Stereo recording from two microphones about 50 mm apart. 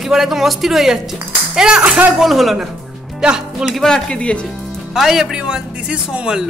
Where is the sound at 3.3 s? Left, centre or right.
Centre.